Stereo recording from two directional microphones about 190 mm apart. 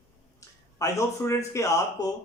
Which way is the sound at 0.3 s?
15° left (ahead or behind).